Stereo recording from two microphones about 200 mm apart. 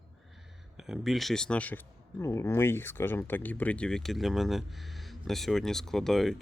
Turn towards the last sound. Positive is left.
turn(degrees=0)  # may be behind; listen again after turning